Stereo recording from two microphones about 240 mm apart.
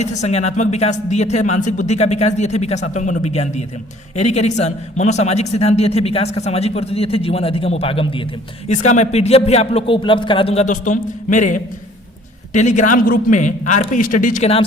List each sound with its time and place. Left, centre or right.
0.0 s a man's voice: left